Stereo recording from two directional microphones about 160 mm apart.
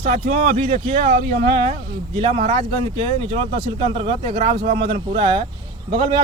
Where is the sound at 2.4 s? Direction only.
55° right (ahead or behind).